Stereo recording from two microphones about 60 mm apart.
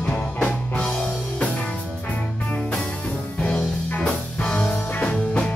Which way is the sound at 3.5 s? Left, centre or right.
Centre.